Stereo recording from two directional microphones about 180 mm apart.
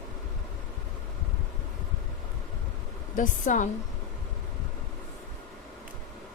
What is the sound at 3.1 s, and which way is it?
Speech, 45° left (ahead or behind).